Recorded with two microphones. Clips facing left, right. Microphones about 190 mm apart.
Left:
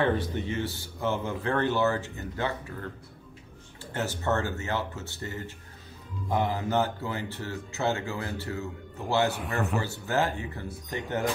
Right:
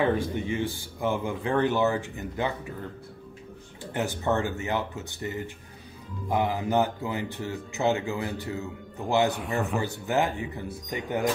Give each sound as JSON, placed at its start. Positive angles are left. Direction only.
{"t": 0.0, "sound": "speech", "side_deg": -15}
{"t": 3.9, "sound": "speech", "side_deg": -15}
{"t": 9.3, "sound": "a man's voice", "side_deg": 0}
{"t": 9.8, "sound": "speech", "side_deg": -15}